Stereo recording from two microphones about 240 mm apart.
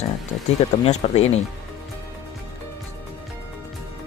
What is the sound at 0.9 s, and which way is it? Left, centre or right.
Speech, left.